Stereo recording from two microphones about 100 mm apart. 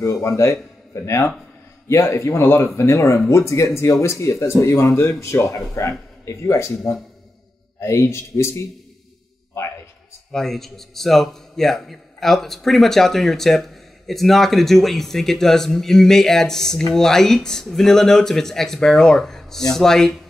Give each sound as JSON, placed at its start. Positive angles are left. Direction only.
{"t": 0.0, "sound": "speech", "side_deg": 30}
{"t": 7.8, "sound": "speech", "side_deg": 30}
{"t": 10.3, "sound": "a man's voice", "side_deg": 5}